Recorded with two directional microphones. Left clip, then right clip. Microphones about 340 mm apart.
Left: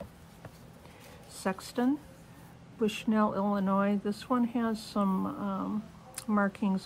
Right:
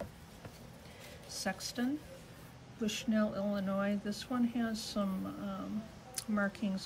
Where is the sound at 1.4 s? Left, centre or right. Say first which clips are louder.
Left 6 dB; centre.